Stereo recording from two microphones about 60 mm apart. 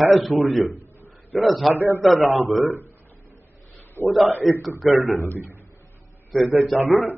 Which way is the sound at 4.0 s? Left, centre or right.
Right.